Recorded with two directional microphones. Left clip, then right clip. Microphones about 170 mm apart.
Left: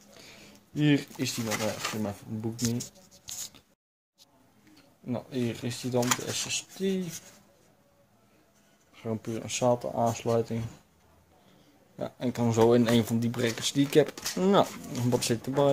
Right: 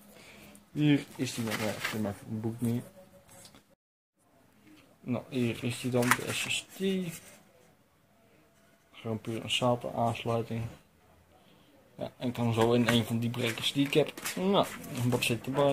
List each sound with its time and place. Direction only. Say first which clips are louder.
0.7 s speech: left 2 dB; 20° left (ahead or behind)
5.0 s speech: even; 15° left (ahead or behind)
8.9 s speech: left 2 dB; 25° left (ahead or behind)
12.0 s speech: left 4 dB; 40° left (ahead or behind)